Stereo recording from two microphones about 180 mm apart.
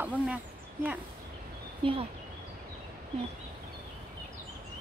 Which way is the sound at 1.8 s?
30° right (ahead or behind).